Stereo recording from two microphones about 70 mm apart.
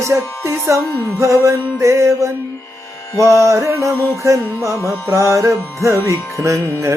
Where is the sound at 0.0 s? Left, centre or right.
Right.